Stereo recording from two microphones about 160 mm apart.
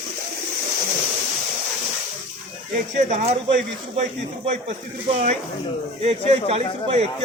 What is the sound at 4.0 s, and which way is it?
Speech, 45° right (ahead or behind).